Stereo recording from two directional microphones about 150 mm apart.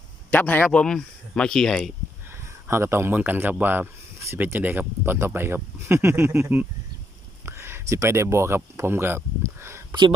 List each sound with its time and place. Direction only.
0.3 s speech: 10° left (ahead or behind)
2.6 s speech: 15° right (ahead or behind)